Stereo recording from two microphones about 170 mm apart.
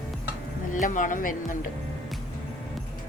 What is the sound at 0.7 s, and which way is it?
Speech, 50° left (ahead or behind).